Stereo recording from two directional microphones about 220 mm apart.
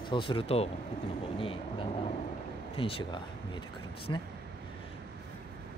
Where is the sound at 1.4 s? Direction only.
25° left (ahead or behind).